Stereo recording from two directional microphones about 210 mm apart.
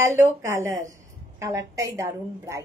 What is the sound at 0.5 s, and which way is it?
A woman's voice, 10° right (ahead or behind).